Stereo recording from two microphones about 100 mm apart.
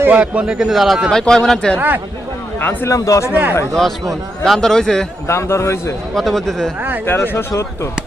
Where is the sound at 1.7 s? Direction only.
20° right (ahead or behind).